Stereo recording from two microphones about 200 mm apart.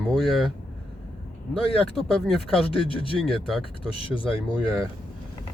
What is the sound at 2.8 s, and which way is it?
Speech, 25° left (ahead or behind).